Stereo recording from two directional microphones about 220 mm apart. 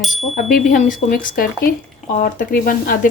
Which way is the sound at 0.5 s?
40° left (ahead or behind).